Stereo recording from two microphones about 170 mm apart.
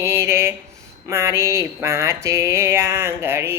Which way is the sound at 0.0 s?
15° right (ahead or behind).